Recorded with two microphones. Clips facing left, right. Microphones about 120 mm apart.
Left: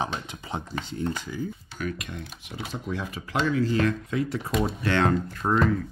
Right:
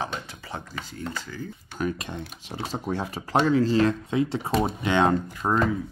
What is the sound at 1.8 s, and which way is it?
Speech, 30° right (ahead or behind).